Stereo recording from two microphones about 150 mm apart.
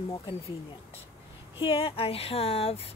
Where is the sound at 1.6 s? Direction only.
40° left (ahead or behind).